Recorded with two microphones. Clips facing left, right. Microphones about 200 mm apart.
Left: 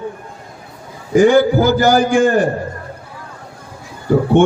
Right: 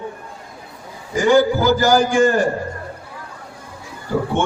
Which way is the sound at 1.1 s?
55° left (ahead or behind).